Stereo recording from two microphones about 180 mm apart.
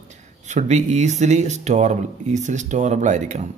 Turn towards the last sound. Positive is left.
turn(degrees=-40)  # may be behind; listen again after turning